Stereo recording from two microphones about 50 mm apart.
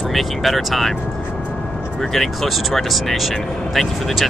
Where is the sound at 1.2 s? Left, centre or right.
Left.